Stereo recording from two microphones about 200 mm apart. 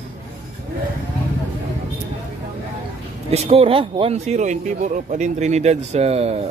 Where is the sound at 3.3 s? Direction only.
30° right (ahead or behind).